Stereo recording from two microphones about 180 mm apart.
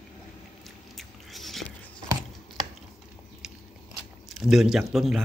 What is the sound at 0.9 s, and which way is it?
Biting, centre (ahead or behind).